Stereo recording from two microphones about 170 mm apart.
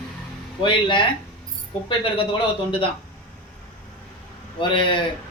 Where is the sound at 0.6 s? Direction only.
30° left (ahead or behind).